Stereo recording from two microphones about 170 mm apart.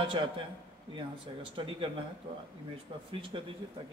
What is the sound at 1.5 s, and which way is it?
Speech, 30° right (ahead or behind).